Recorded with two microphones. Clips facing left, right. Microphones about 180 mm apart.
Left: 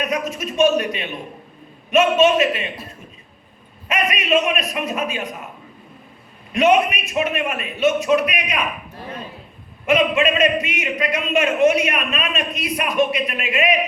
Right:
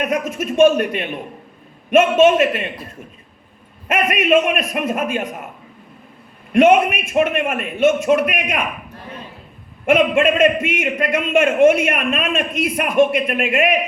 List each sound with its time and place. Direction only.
0.0 s a man's voice: 50° right (ahead or behind)
3.8 s a man's voice: 50° right (ahead or behind)
6.5 s a man's voice: 50° right (ahead or behind)
9.8 s a man's voice: 50° right (ahead or behind)